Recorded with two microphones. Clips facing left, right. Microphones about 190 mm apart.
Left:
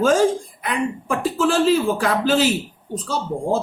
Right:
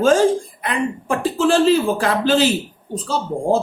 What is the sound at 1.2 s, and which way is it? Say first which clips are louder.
A man's voice: right 3 dB; 30° right (ahead or behind).